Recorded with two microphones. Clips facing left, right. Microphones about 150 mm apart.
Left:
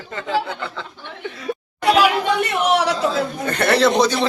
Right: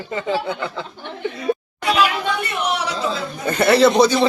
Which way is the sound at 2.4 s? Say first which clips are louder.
Left 5 dB; 90° left.